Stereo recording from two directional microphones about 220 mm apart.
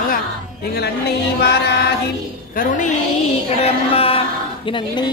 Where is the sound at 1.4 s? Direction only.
50° left (ahead or behind).